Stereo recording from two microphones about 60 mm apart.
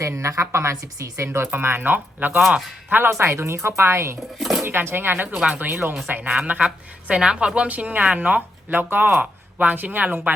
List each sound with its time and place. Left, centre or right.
0.0 s a woman's voice: right
1.5 s speech: right
3.1 s a woman's voice: right
4.4 s speech: centre
4.6 s speech: right
5.3 s a woman's voice: centre
6.3 s a woman's voice: centre